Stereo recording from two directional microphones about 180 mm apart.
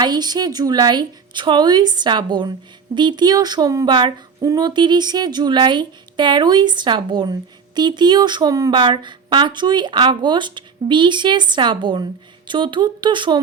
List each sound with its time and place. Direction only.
0.0 s speech: 20° right (ahead or behind)